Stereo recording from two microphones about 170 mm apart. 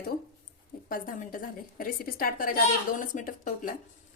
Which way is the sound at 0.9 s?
55° left (ahead or behind).